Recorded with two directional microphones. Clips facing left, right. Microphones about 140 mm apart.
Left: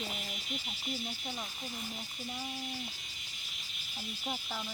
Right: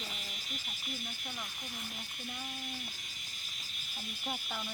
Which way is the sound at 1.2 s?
30° left (ahead or behind).